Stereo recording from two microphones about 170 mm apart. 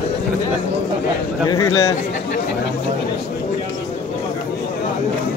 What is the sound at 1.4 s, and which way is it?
Speech, 20° left (ahead or behind).